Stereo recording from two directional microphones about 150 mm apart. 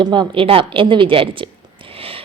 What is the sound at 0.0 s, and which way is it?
A woman's voice, 30° right (ahead or behind).